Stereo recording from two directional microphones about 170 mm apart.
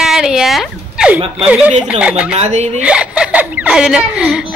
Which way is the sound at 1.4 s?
5° right (ahead or behind).